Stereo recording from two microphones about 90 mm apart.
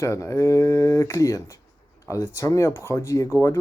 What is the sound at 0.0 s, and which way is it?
Speech, 30° left (ahead or behind).